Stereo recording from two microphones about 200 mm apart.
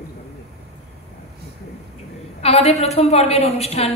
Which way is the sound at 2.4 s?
30° left (ahead or behind).